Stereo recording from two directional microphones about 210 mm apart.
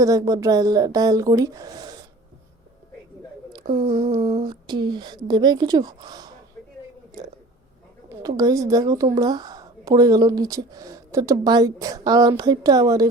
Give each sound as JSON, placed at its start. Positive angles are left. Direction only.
{"t": 0.0, "sound": "a woman's voice", "side_deg": -15}
{"t": 3.7, "sound": "a woman's voice", "side_deg": -25}
{"t": 8.3, "sound": "a woman's voice", "side_deg": -15}